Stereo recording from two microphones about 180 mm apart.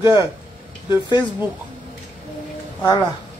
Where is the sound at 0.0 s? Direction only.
20° left (ahead or behind).